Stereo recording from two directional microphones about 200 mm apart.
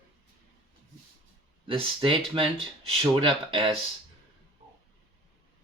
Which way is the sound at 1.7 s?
25° right (ahead or behind).